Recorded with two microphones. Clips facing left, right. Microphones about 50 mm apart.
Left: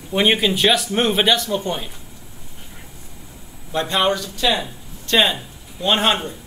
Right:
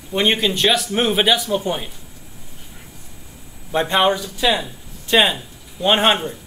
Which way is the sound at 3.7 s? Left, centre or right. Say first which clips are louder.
Right 2 dB; right.